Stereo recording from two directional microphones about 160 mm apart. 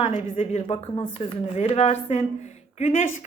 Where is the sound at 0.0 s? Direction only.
40° left (ahead or behind).